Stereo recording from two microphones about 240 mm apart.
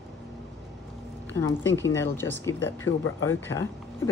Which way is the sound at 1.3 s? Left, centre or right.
Centre.